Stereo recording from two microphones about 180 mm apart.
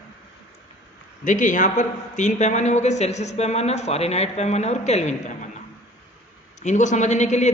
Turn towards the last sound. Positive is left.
turn(degrees=40)  # may be behind; listen again after turning